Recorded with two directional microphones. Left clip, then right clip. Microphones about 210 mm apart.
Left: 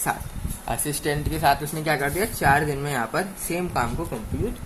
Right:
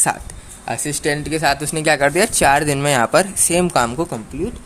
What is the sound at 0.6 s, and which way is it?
Speech, 25° right (ahead or behind).